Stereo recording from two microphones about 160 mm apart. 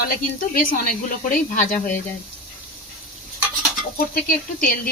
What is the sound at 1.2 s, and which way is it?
Speech, 55° left (ahead or behind).